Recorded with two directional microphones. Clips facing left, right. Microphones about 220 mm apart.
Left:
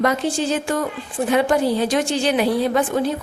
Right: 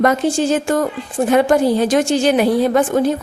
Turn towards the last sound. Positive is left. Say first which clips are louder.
# right 5 dB
turn(degrees=-45)  # may be behind; listen again after turning